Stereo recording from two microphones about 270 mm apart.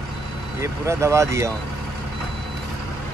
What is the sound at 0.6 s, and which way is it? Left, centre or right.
Speech, centre.